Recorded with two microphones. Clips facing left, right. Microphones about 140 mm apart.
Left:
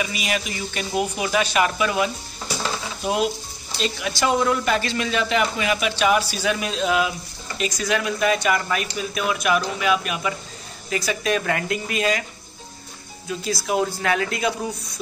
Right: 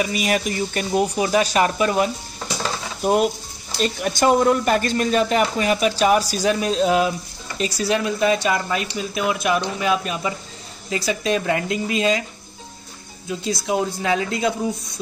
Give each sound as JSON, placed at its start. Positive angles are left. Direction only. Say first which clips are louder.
{"t": 0.0, "sound": "speech", "louder": "right 5 dB", "side_deg": -40}
{"t": 3.0, "sound": "stir", "louder": "right 5 dB", "side_deg": -50}
{"t": 3.8, "sound": "speech", "louder": "right 4 dB", "side_deg": -50}
{"t": 13.3, "sound": "speech", "louder": "right 1 dB", "side_deg": -20}